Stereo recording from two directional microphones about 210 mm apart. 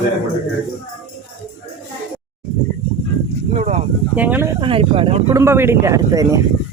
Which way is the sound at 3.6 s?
30° right (ahead or behind).